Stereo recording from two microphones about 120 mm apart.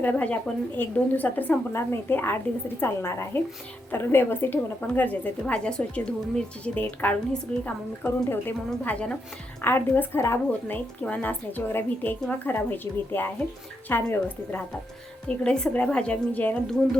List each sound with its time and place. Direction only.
0.0 s a woman's voice: 15° left (ahead or behind)